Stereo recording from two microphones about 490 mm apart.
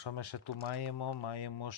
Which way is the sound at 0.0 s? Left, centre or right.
Left.